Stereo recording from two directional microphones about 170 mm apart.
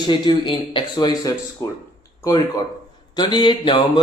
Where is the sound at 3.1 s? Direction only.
25° left (ahead or behind).